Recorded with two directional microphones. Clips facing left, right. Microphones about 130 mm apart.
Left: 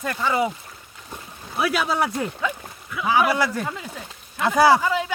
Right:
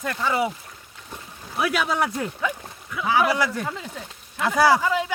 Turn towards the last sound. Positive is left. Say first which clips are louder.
# left 2 dB
turn(degrees=20)  # may be behind; listen again after turning